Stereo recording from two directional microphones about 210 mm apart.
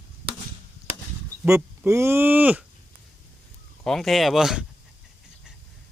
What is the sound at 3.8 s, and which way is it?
Speech, centre (ahead or behind).